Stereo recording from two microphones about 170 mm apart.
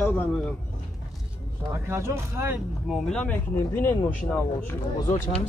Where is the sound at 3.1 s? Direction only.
5° left (ahead or behind).